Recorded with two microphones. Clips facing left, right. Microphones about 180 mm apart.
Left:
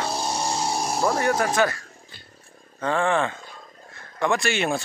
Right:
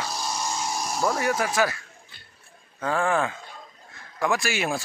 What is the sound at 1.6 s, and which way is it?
Speech, 5° right (ahead or behind).